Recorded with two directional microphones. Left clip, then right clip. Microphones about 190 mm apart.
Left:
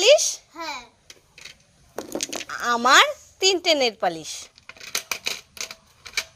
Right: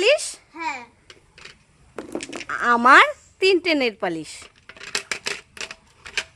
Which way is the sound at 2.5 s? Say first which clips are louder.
Right 4 dB; 10° right (ahead or behind).